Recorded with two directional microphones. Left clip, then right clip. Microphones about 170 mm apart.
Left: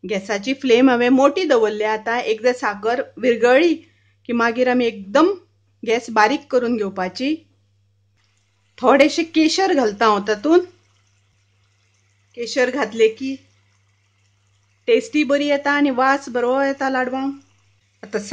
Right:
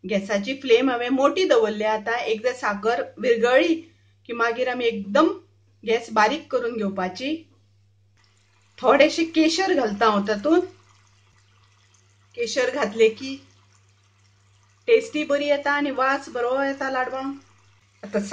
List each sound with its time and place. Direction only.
0.0 s speech: 45° left (ahead or behind)
8.7 s speech: 45° left (ahead or behind)
12.3 s speech: 45° left (ahead or behind)
14.9 s speech: 45° left (ahead or behind)